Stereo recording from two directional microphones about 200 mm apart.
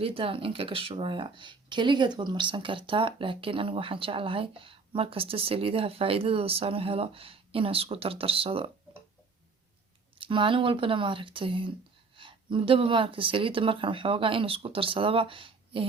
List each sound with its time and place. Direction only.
0.0 s speech: 25° right (ahead or behind)
10.2 s speech: 25° right (ahead or behind)